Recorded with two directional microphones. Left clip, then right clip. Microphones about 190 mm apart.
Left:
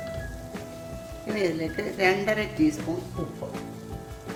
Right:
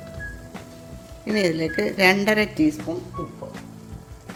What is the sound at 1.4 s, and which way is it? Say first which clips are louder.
A woman's voice: right 6 dB; 55° right (ahead or behind).